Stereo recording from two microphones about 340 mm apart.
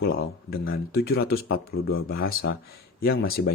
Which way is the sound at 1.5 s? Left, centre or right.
Left.